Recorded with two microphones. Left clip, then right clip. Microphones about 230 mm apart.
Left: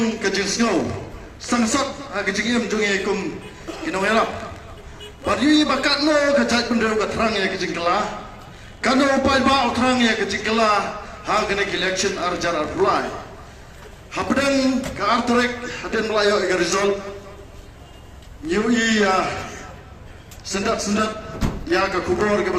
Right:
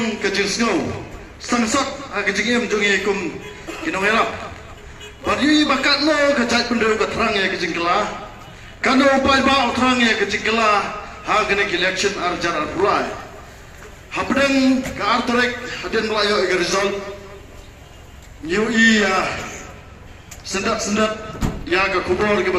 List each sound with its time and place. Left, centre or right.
0.0 s a man's voice: left
14.1 s a man's voice: left
18.4 s a man's voice: left
20.4 s a man's voice: left